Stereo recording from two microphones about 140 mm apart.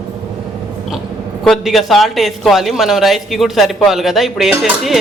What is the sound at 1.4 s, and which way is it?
Speech, centre (ahead or behind).